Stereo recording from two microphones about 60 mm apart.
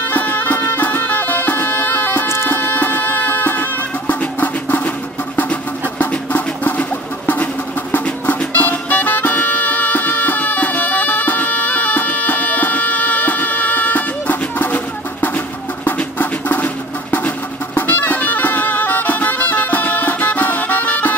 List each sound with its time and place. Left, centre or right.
0.1 s music: left
2.2 s bagpipes: left
2.5 s music: left
4.1 s a sound: left
8.4 s music: left
15.2 s a sound: left
17.7 s music: left